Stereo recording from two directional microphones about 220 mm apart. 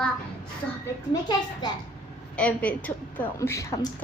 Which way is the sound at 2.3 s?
5° left (ahead or behind).